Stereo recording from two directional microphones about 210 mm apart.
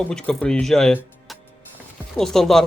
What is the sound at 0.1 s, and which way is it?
Speech, 5° left (ahead or behind).